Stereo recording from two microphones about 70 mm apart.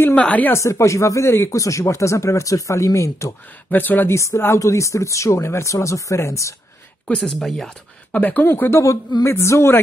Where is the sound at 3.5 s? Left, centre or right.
Left.